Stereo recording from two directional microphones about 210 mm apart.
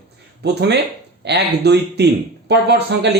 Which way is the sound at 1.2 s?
50° right (ahead or behind).